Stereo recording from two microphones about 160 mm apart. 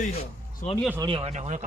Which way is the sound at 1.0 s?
35° right (ahead or behind).